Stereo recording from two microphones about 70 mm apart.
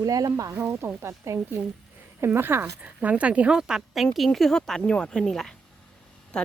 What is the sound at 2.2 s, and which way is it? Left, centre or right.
Speech, right.